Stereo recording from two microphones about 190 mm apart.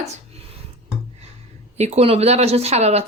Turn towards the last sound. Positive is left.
turn(degrees=-35)  # may be behind; listen again after turning